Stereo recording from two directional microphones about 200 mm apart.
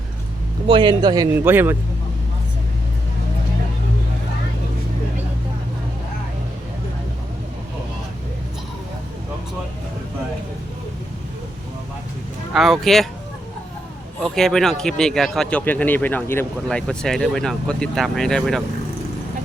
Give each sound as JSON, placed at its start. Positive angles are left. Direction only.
{"t": 0.7, "sound": "speech", "side_deg": -25}
{"t": 12.5, "sound": "speech", "side_deg": 0}
{"t": 14.3, "sound": "speech", "side_deg": 0}